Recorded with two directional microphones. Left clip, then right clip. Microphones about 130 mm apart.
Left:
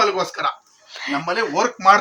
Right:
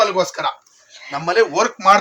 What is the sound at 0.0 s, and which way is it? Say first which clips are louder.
Speech: right 2 dB; centre (ahead or behind).